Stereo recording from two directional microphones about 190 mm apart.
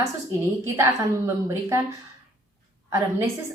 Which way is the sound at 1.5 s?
15° right (ahead or behind).